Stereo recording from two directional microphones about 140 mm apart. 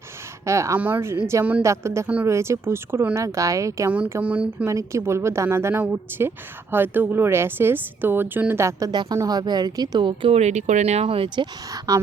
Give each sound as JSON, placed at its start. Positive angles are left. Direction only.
{"t": 0.4, "sound": "a woman's voice", "side_deg": -20}
{"t": 4.2, "sound": "speech", "side_deg": -10}
{"t": 4.7, "sound": "a woman's voice", "side_deg": -20}
{"t": 11.9, "sound": "a woman's voice", "side_deg": -25}